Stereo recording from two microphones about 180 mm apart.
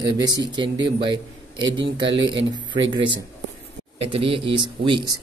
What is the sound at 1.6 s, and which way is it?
Speech, 90° right.